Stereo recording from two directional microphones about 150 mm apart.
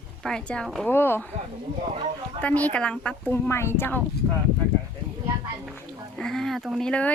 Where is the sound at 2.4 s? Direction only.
10° left (ahead or behind).